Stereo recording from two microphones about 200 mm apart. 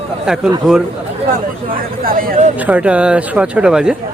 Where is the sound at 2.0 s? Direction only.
45° right (ahead or behind).